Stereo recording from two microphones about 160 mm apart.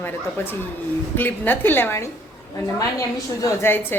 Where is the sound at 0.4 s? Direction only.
15° left (ahead or behind).